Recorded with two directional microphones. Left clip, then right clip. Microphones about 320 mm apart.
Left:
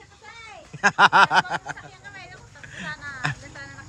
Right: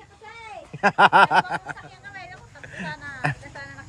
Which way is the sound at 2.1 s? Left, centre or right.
Right.